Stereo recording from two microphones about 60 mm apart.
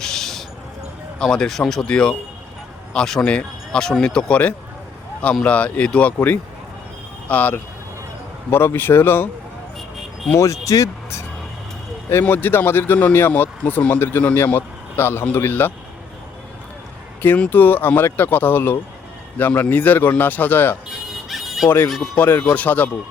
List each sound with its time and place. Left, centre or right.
0.0 s a sound: centre
1.2 s speech: centre
3.2 s speech: centre
6.1 s speech: left
8.4 s speech: left
10.3 s speech: left
12.2 s speech: left
17.2 s speech: left
21.2 s fowl: centre
21.8 s speech: centre
22.2 s speech: left